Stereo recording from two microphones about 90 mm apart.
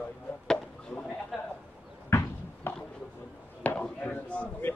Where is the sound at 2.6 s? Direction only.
25° left (ahead or behind).